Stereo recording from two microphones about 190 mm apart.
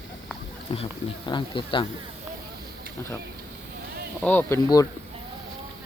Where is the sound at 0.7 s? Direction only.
30° left (ahead or behind).